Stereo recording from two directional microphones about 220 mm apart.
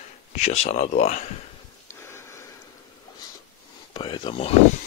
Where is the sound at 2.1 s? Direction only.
10° left (ahead or behind).